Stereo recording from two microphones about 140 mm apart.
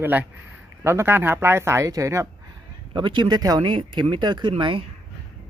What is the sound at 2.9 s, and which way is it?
Speech, 35° right (ahead or behind).